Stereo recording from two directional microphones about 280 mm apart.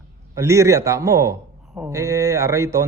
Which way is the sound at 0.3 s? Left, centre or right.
Centre.